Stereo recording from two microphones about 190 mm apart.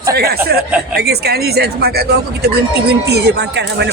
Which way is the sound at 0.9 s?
55° right (ahead or behind).